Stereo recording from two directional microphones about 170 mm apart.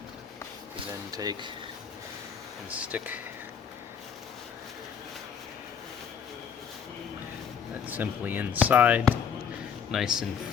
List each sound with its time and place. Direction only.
1.1 s speech: 25° right (ahead or behind)
2.6 s speech: 10° right (ahead or behind)
7.9 s speech: 10° right (ahead or behind)